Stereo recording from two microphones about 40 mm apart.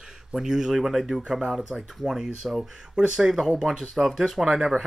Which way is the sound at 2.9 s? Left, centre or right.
Right.